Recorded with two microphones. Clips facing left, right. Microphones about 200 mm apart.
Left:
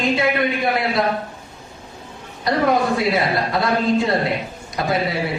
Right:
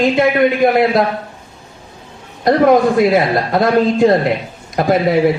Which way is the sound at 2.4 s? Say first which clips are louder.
Right 8 dB; 50° right (ahead or behind).